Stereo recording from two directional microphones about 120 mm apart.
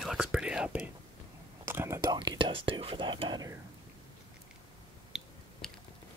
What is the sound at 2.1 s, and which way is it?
Whispering, 40° right (ahead or behind).